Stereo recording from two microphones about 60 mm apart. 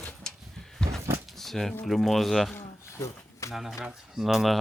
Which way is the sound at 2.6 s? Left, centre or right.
Left.